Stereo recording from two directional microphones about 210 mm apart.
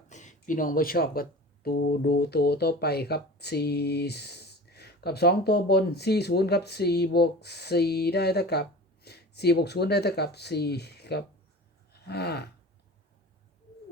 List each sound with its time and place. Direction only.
0.1 s speech: 35° left (ahead or behind); by 12.5 s 50° left (ahead or behind)